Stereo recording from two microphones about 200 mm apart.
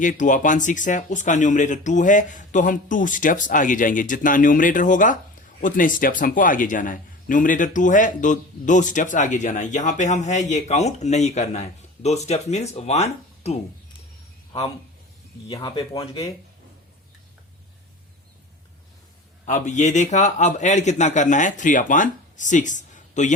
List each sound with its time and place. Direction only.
0.0 s speech: 40° left (ahead or behind)
15.4 s speech: 20° left (ahead or behind)
19.5 s speech: 35° left (ahead or behind)